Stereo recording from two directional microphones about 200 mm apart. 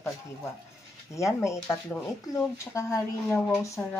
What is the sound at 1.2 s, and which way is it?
Speech, 15° left (ahead or behind).